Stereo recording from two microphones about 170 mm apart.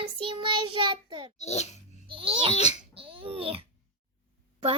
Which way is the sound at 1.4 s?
40° left (ahead or behind).